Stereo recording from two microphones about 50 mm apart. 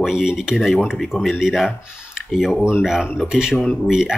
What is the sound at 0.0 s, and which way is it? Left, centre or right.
Speech, centre.